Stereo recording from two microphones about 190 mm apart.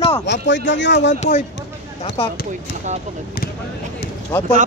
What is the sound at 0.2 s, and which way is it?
Speech, 70° left (ahead or behind).